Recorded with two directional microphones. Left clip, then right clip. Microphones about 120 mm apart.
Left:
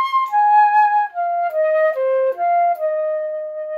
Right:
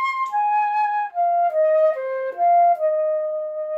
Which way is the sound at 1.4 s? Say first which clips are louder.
Left 1 dB; 15° left (ahead or behind).